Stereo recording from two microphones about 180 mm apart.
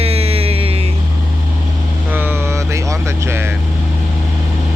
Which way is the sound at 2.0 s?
10° right (ahead or behind).